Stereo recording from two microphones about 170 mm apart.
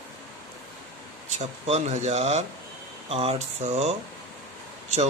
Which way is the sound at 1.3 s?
40° right (ahead or behind).